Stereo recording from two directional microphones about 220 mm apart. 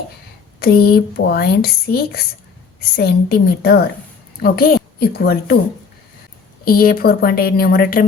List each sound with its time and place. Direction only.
0.6 s a woman's voice: 45° left (ahead or behind)
6.7 s speech: 40° left (ahead or behind)